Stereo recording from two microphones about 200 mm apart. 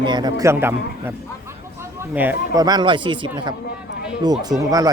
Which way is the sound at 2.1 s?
10° right (ahead or behind).